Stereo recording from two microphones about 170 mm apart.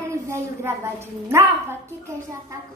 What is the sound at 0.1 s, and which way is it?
A woman's voice, 15° right (ahead or behind).